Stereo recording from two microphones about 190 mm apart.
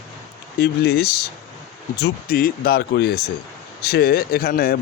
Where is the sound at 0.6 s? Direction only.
60° left (ahead or behind).